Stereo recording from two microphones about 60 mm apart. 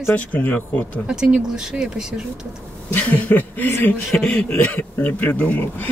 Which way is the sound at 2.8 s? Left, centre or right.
Left.